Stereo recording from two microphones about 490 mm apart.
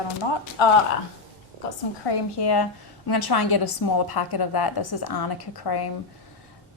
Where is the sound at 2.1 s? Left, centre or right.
Left.